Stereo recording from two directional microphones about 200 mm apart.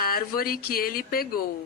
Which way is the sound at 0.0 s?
50° left (ahead or behind).